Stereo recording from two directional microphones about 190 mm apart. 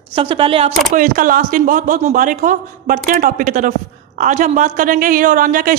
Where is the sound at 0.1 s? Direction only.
30° right (ahead or behind).